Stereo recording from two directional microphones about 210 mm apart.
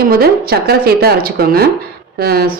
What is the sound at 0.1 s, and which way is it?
A woman's voice, 45° right (ahead or behind).